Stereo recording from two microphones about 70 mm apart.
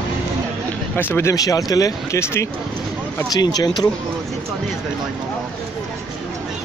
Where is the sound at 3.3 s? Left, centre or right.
Left.